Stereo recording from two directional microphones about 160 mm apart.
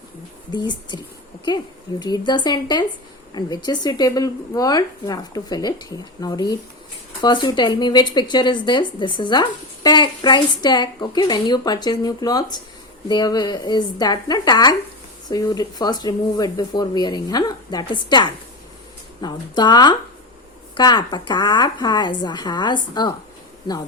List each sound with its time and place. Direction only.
0.5 s speech: 25° left (ahead or behind)